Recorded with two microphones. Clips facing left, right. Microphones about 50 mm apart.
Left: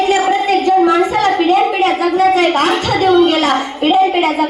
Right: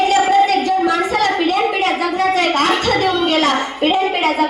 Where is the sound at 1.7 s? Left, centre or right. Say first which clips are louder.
Left 4 dB; centre.